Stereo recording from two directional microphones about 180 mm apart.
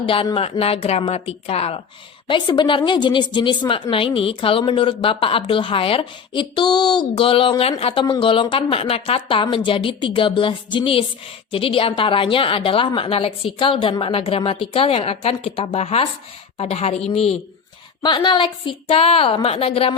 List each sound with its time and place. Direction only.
0.0 s a woman's voice: 30° left (ahead or behind)
18.0 s a woman's voice: 25° left (ahead or behind)